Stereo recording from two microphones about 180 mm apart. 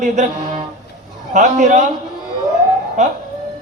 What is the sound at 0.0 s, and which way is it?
A man's voice, 40° right (ahead or behind).